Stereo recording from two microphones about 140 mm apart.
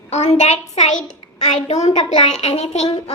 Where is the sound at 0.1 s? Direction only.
55° left (ahead or behind).